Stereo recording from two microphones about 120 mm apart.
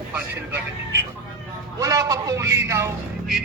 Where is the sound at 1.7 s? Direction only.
30° right (ahead or behind).